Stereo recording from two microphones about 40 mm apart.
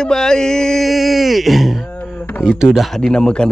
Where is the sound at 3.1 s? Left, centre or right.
Left.